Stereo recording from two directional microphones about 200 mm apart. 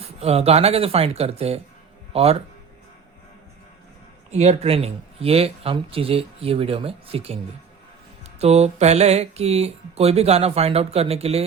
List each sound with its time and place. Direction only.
0.0 s speech: 30° right (ahead or behind)
4.3 s speech: 35° right (ahead or behind)
8.4 s speech: 30° right (ahead or behind)